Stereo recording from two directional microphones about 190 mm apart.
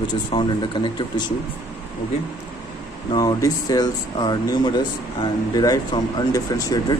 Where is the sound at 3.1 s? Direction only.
20° left (ahead or behind).